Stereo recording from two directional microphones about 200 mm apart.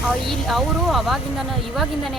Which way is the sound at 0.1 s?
Centre (ahead or behind).